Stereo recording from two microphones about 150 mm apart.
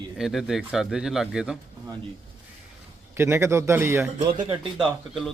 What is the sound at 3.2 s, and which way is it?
Speech, 15° right (ahead or behind).